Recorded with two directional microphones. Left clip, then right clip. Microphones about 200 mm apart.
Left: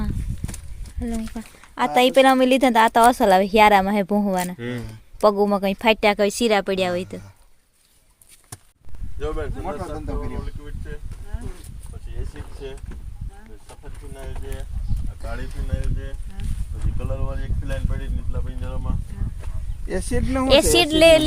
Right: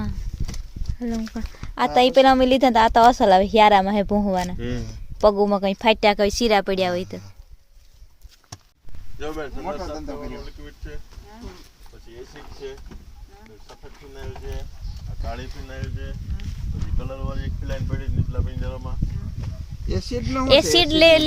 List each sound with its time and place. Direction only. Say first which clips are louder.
0.9 s speech: right 1 dB; 5° right (ahead or behind)
1.8 s a woman's voice: even; centre (ahead or behind)
9.1 s speech: left 2 dB; 20° right (ahead or behind)
9.6 s a woman's voice: even; centre (ahead or behind)
14.2 s speech: even; 15° right (ahead or behind)
17.2 s speech: even; 15° right (ahead or behind)
19.9 s speech: left 2 dB; 20° left (ahead or behind)
20.2 s a woman's voice: even; centre (ahead or behind)